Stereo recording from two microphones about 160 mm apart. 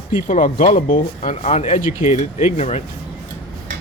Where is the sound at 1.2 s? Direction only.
45° left (ahead or behind).